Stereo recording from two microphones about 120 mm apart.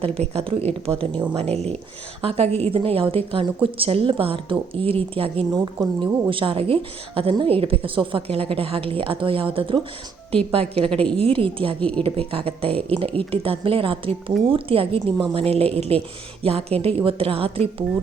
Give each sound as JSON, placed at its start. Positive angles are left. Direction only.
{"t": 0.0, "sound": "a woman's voice", "side_deg": -55}
{"t": 5.5, "sound": "a woman's voice", "side_deg": -30}
{"t": 6.3, "sound": "a woman's voice", "side_deg": -50}
{"t": 11.8, "sound": "speech", "side_deg": 10}
{"t": 12.3, "sound": "a woman's voice", "side_deg": -50}